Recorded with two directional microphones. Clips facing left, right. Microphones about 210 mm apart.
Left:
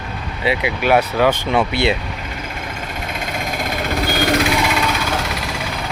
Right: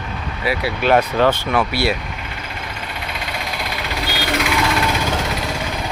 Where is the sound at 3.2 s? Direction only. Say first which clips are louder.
Left 4 dB; 45° left (ahead or behind).